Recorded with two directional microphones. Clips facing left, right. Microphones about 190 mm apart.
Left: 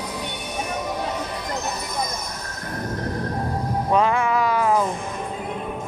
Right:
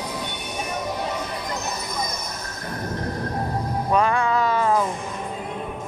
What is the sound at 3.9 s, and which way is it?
Music, 20° left (ahead or behind).